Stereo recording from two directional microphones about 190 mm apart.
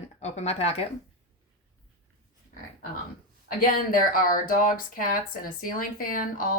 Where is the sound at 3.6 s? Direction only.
50° left (ahead or behind).